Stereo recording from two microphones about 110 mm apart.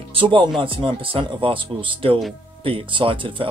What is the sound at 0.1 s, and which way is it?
Speech, 50° right (ahead or behind).